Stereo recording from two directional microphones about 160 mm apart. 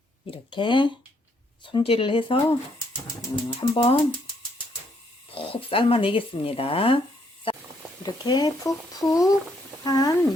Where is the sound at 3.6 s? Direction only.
30° left (ahead or behind).